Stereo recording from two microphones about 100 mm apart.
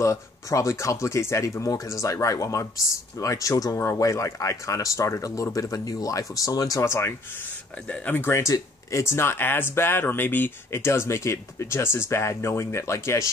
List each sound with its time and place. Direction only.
0.0 s speech: 30° left (ahead or behind)
7.9 s speech: 15° left (ahead or behind)